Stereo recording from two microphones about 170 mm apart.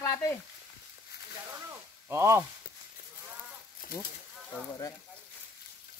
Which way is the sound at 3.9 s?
60° left (ahead or behind).